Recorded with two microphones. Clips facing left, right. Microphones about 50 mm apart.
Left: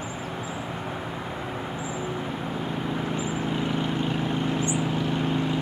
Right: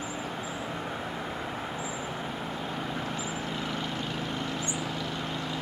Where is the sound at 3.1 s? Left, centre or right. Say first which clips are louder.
Left 6 dB; left.